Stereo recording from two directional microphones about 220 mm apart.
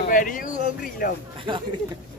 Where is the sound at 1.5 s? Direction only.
25° right (ahead or behind).